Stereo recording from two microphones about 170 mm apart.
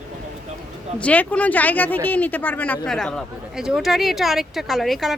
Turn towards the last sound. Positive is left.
turn(degrees=0)  # may be behind; listen again after turning